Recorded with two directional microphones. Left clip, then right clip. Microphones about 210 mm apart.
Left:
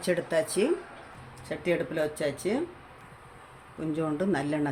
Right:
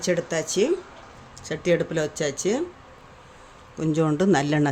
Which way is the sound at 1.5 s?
40° right (ahead or behind).